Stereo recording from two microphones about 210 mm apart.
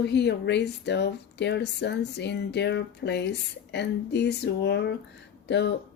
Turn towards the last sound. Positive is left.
turn(degrees=55)  # may be behind; listen again after turning